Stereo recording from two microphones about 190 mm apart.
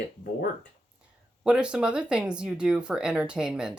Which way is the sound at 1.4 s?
5° right (ahead or behind).